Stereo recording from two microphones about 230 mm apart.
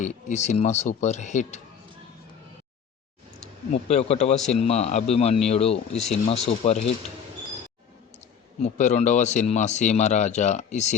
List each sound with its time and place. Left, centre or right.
0.0 s speech: left
3.8 s speech: left
8.6 s speech: left